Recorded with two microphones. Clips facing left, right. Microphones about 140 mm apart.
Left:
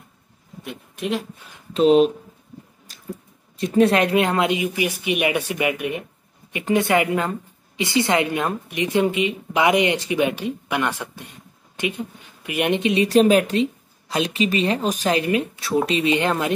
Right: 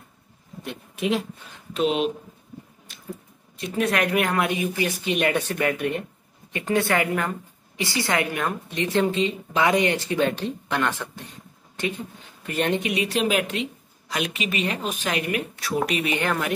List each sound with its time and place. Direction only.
0.7 s speech: centre (ahead or behind)
1.8 s speech: 35° left (ahead or behind)
2.9 s a sound: 40° left (ahead or behind)
3.6 s a woman's voice: 30° left (ahead or behind); by 11.2 s 10° left (ahead or behind)
12.4 s speech: 15° left (ahead or behind)
13.1 s speech: 40° left (ahead or behind)